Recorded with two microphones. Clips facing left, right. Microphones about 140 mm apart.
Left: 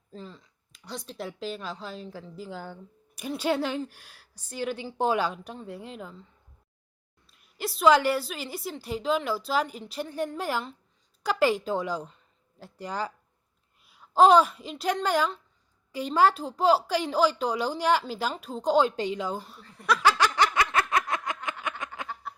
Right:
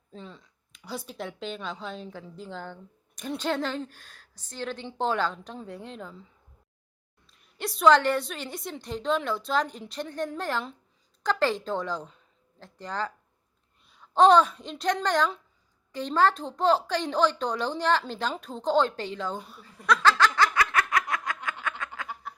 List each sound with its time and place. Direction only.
0.1 s a woman's voice: centre (ahead or behind)
7.3 s a woman's voice: centre (ahead or behind)
19.4 s snicker: centre (ahead or behind); by 21.5 s 25° left (ahead or behind)
21.6 s music: 20° left (ahead or behind)
22.3 s a sound: centre (ahead or behind)